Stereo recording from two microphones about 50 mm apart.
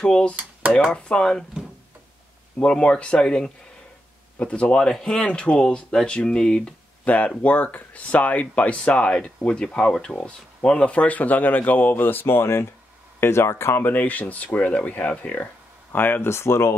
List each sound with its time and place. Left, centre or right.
0.0 s speech: centre
0.4 s dishes: right
0.9 s speech: centre
2.6 s speech: left
13.9 s speech: left
15.9 s speech: left
16.3 s speech: left